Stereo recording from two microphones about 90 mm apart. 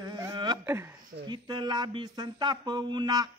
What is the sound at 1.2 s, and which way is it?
Mantra, 55° right (ahead or behind).